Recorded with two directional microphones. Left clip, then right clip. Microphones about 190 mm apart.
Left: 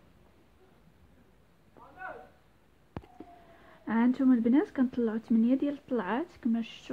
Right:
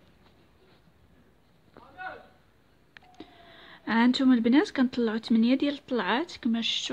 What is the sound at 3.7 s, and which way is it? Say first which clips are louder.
Speech: right 5 dB; 20° right (ahead or behind).